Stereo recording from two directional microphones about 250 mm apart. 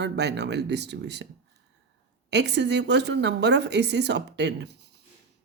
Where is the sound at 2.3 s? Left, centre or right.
Right.